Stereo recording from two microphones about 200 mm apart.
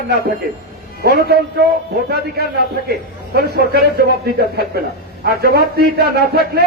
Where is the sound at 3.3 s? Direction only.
55° right (ahead or behind).